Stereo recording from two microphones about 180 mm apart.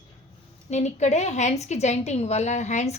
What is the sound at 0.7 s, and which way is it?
A woman's voice, 40° left (ahead or behind).